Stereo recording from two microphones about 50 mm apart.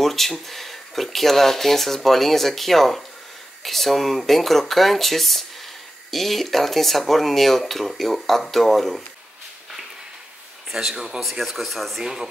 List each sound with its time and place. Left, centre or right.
0.0 s speech: centre
10.7 s speech: centre